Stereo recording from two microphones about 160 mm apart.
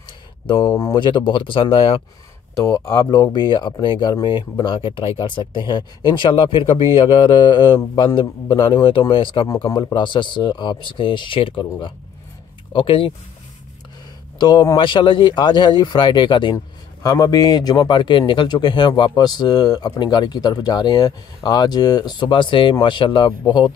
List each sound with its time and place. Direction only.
0.5 s speech: 25° left (ahead or behind)
2.5 s a man's voice: 20° left (ahead or behind)
12.7 s a man's voice: 30° left (ahead or behind)
14.4 s speech: 25° left (ahead or behind)